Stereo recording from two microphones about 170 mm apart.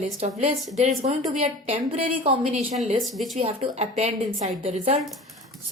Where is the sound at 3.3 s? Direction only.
35° right (ahead or behind).